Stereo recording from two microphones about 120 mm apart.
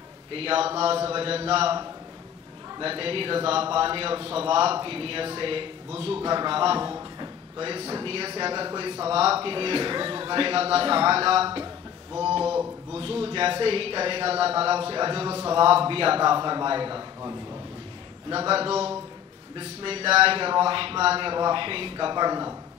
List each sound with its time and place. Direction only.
0.3 s speech: 50° right (ahead or behind)
2.8 s speech: 50° right (ahead or behind)
6.8 s speech: 30° right (ahead or behind)
9.1 s speech: 55° right (ahead or behind)
12.9 s speech: 50° right (ahead or behind)
18.5 s speech: 55° right (ahead or behind); by 22.6 s 30° right (ahead or behind)